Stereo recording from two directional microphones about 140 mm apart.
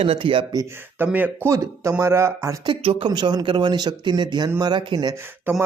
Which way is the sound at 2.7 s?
35° right (ahead or behind).